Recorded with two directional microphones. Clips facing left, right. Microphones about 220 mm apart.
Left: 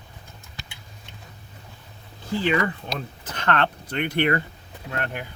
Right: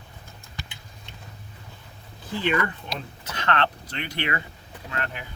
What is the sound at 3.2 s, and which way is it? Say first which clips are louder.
Speech: left 2 dB; 50° left (ahead or behind).